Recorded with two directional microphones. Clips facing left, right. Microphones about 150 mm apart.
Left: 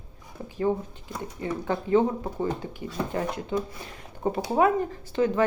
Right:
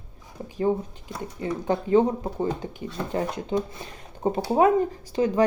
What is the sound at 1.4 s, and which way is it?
Speech, 20° right (ahead or behind).